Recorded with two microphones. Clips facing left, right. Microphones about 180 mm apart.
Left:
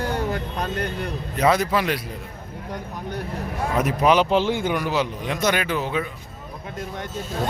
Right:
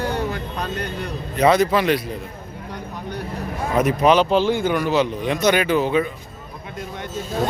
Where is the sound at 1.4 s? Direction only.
5° left (ahead or behind).